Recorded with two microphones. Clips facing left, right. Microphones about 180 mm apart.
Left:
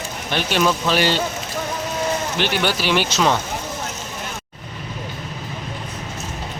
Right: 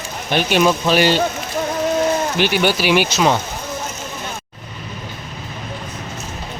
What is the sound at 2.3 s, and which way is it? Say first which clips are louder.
Speech: right 4 dB; 10° right (ahead or behind).